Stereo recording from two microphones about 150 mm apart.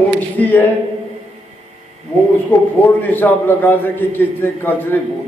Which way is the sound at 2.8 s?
15° left (ahead or behind).